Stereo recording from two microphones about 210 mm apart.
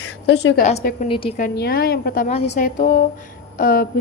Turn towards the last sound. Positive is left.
turn(degrees=45)  # may be behind; listen again after turning